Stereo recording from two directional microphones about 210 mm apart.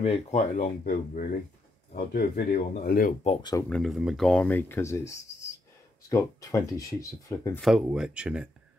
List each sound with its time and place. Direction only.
0.0 s speech: 30° left (ahead or behind)
3.3 s speech: 20° left (ahead or behind)
3.6 s speech: centre (ahead or behind)
7.6 s speech: 5° right (ahead or behind)